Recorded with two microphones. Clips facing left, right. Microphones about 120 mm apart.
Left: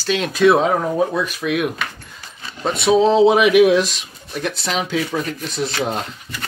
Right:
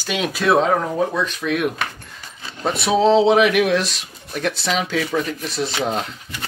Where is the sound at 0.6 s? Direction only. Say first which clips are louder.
Left 1 dB; 10° left (ahead or behind).